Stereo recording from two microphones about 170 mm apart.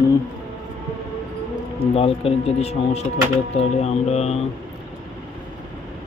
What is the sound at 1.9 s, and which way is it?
Speech, 35° left (ahead or behind).